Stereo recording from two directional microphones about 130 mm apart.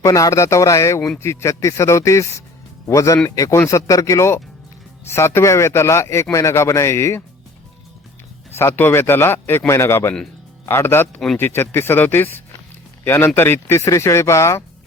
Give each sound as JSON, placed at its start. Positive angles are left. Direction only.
{"t": 0.0, "sound": "speech", "side_deg": 25}
{"t": 8.5, "sound": "a man's voice", "side_deg": 20}